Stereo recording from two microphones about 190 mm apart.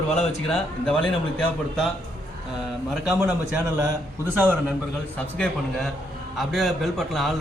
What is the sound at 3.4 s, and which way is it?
A man's voice, 15° right (ahead or behind).